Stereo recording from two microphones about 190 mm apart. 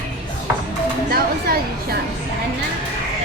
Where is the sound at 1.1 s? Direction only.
55° right (ahead or behind).